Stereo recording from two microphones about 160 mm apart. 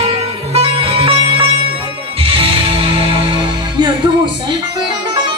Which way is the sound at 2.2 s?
35° right (ahead or behind).